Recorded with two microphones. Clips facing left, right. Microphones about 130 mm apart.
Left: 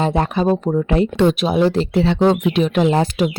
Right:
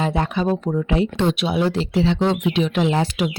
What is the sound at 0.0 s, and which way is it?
Speech, 40° left (ahead or behind).